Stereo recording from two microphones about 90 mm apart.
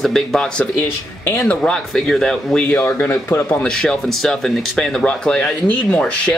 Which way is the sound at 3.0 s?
25° left (ahead or behind).